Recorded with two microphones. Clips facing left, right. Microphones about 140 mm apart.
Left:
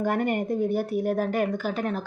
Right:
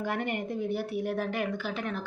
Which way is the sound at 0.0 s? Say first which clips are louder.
Left 7 dB; 45° left (ahead or behind).